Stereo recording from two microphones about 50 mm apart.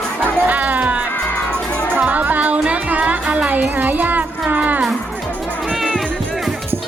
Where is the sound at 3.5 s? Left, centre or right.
Right.